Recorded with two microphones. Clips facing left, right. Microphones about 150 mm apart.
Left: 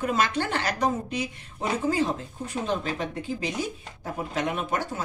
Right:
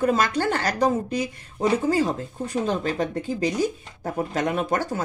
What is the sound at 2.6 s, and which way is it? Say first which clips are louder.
Speech: right 2 dB; 45° right (ahead or behind).